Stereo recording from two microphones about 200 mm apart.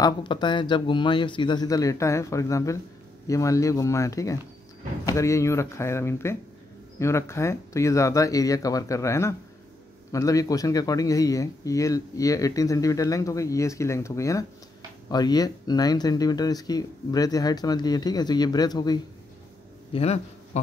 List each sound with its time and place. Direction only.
0.0 s speech: 25° left (ahead or behind)
19.9 s speech: 30° left (ahead or behind)